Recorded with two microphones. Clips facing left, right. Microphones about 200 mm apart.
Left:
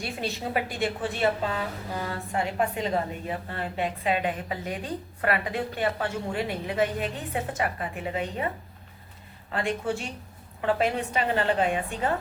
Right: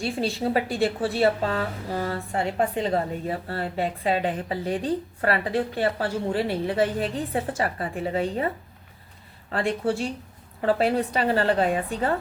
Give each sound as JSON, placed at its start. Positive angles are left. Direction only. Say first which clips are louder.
{"t": 0.0, "sound": "a woman's voice", "louder": "right 6 dB", "side_deg": -30}
{"t": 9.5, "sound": "a woman's voice", "louder": "right 3 dB", "side_deg": -35}